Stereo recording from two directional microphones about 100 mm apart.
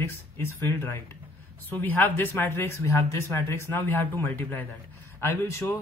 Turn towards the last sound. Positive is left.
turn(degrees=25)  # may be behind; listen again after turning